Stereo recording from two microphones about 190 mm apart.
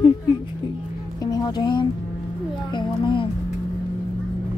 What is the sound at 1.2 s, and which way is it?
A child's voice, 20° left (ahead or behind).